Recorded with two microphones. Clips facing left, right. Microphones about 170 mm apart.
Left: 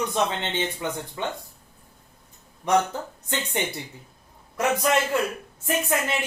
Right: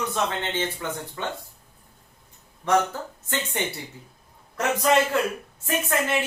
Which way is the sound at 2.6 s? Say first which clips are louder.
Even; 15° left (ahead or behind).